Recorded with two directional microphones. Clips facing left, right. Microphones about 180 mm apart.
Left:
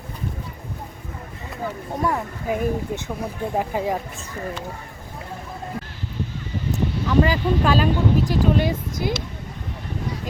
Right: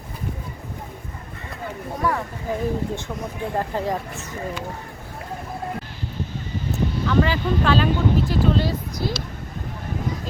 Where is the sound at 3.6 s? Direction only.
10° left (ahead or behind).